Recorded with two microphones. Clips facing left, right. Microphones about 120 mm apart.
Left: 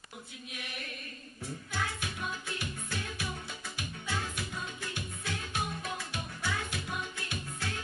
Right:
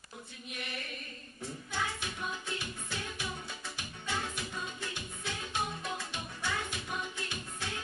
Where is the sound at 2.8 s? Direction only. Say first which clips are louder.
Left 1 dB; 15° right (ahead or behind).